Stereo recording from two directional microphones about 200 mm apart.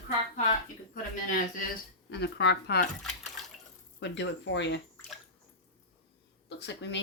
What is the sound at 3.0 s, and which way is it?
Bathtub, centre (ahead or behind).